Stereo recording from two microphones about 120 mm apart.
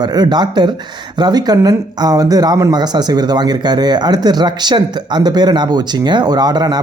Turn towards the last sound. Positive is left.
turn(degrees=-35)  # may be behind; listen again after turning